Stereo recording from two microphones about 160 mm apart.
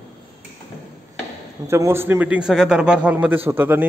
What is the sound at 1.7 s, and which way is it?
A man's voice, 15° right (ahead or behind).